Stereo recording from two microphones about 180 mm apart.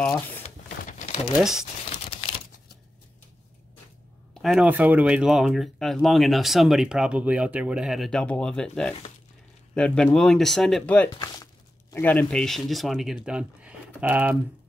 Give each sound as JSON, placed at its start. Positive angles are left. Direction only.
{"t": 0.4, "sound": "crumpling", "side_deg": 40}
{"t": 1.4, "sound": "speech", "side_deg": 0}
{"t": 4.3, "sound": "speech", "side_deg": 0}